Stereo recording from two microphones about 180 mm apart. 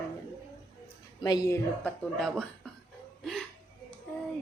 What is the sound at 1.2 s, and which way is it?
Speech, 20° left (ahead or behind).